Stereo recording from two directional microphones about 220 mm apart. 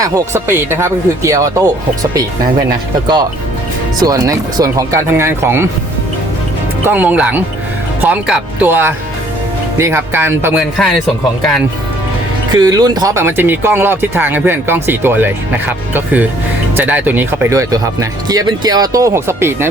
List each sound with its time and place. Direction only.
0.0 s speech: 15° right (ahead or behind)
6.8 s speech: 10° right (ahead or behind)
12.5 s speech: 15° right (ahead or behind)